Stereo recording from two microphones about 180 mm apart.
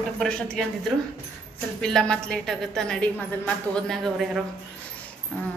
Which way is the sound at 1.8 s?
5° left (ahead or behind).